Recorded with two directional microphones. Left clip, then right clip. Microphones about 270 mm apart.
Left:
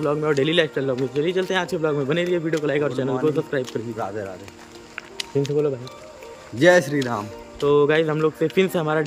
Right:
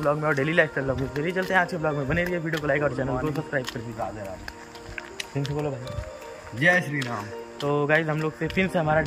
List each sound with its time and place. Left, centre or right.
0.0 s speech: centre
5.3 s speech: centre
6.6 s a man's voice: centre
7.6 s speech: centre